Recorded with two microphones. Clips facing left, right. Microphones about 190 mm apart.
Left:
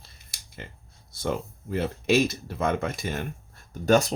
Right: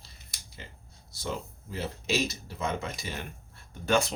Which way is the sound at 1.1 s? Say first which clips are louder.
Left 6 dB; 55° left (ahead or behind).